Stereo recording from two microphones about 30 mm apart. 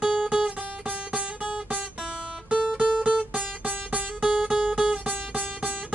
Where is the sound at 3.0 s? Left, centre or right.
Right.